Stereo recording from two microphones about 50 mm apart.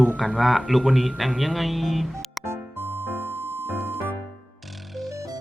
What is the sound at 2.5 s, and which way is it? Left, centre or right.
Music, right.